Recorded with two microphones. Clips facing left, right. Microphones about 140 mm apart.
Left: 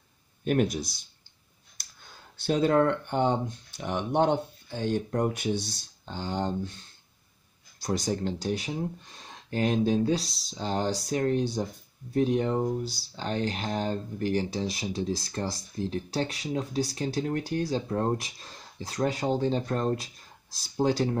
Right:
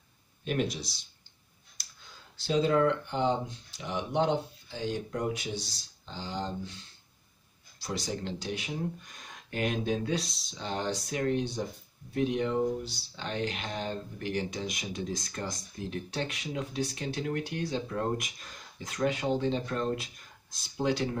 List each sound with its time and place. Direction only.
0.5 s speech: 50° left (ahead or behind)
1.8 s a sound: 50° left (ahead or behind)
2.3 s speech: 55° left (ahead or behind)
7.8 s speech: 45° left (ahead or behind)